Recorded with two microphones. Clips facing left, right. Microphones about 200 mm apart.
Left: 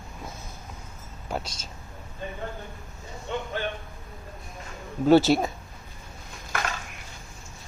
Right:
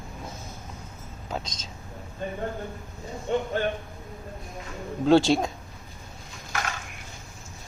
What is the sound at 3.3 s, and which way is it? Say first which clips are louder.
Speech: right 6 dB; 45° right (ahead or behind).